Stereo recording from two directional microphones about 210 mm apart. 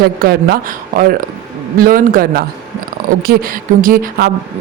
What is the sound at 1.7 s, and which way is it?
Speech, 45° right (ahead or behind).